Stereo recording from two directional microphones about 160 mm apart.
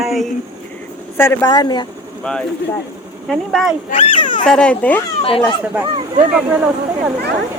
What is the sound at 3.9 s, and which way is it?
Speech, 35° left (ahead or behind).